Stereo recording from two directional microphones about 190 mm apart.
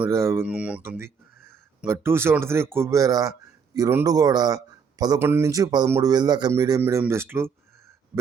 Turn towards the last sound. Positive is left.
turn(degrees=-15)  # may be behind; listen again after turning